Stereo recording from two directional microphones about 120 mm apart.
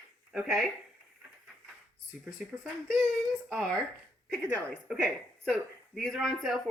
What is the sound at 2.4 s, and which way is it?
Speech, centre (ahead or behind).